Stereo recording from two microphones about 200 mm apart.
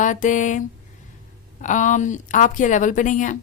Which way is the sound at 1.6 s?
40° left (ahead or behind).